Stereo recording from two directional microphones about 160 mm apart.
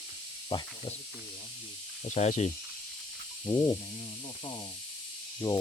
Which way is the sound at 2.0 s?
45° left (ahead or behind).